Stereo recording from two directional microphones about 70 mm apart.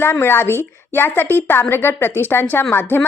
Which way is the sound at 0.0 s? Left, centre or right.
Left.